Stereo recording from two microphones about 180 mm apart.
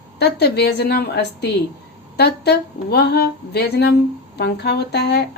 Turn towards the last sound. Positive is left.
turn(degrees=65)  # may be behind; listen again after turning